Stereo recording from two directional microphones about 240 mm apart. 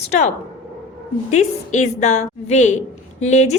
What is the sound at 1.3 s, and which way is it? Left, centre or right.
A woman's voice, left.